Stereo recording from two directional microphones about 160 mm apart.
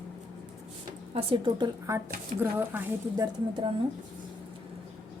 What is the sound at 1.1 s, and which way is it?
Speech, 35° right (ahead or behind).